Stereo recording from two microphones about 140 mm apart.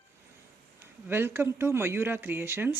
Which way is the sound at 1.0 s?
15° right (ahead or behind).